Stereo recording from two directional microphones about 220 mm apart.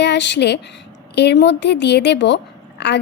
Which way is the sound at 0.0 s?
50° left (ahead or behind).